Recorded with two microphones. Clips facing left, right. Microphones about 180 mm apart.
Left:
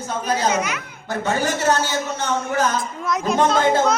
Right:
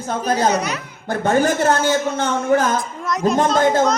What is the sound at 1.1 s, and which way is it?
A man's voice, 50° right (ahead or behind).